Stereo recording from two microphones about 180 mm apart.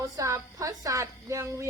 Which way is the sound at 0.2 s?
20° right (ahead or behind).